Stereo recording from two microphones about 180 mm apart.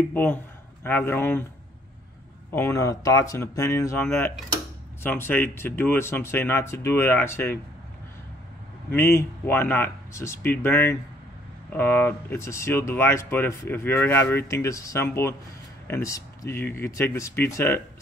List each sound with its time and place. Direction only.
0.1 s speech: 10° left (ahead or behind)
2.5 s speech: 15° left (ahead or behind)
8.9 s speech: 15° left (ahead or behind)